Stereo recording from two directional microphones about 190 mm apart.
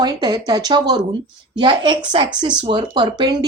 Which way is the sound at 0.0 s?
20° right (ahead or behind).